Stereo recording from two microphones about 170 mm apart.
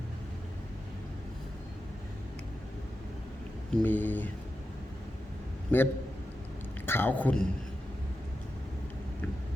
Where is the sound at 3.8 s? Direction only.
10° left (ahead or behind).